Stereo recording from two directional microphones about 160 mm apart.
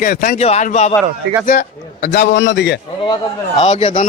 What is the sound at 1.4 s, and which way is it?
Speech, 65° left (ahead or behind).